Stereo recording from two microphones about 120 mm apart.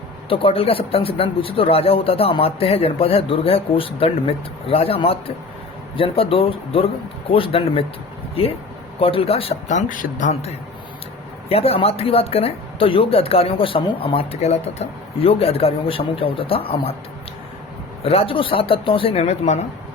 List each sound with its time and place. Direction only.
0.3 s speech: 50° left (ahead or behind)
9.0 s speech: 50° left (ahead or behind)
9.6 s a man's voice: 90° left
11.4 s speech: 55° left (ahead or behind)
18.0 s speech: 55° left (ahead or behind)